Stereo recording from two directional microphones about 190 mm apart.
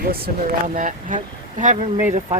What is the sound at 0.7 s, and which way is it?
Speech, 45° right (ahead or behind).